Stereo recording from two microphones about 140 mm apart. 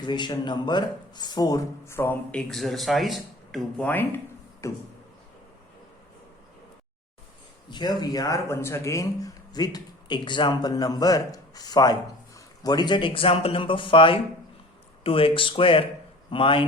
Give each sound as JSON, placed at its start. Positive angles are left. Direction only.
{"t": 0.0, "sound": "speech", "side_deg": 30}
{"t": 2.5, "sound": "speech", "side_deg": 0}
{"t": 3.8, "sound": "speech", "side_deg": 15}
{"t": 7.7, "sound": "speech", "side_deg": 30}